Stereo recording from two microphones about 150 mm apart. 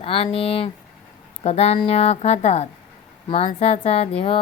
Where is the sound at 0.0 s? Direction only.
40° left (ahead or behind).